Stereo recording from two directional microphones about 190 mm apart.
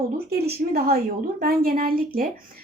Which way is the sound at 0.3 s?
55° right (ahead or behind).